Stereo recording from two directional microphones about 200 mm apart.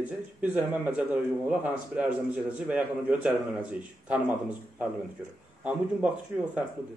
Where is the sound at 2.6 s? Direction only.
5° right (ahead or behind).